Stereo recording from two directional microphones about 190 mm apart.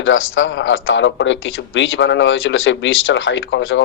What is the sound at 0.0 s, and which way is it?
A man's voice, 90° left.